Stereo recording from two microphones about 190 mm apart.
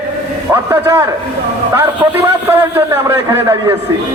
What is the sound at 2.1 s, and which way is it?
A man's voice, 10° right (ahead or behind).